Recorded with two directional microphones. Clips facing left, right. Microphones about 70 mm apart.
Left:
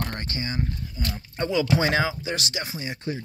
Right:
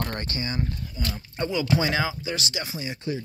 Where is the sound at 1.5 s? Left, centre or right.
Left.